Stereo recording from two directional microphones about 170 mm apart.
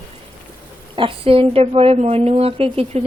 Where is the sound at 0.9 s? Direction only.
30° right (ahead or behind).